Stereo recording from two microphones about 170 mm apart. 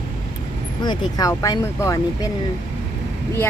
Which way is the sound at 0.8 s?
25° left (ahead or behind).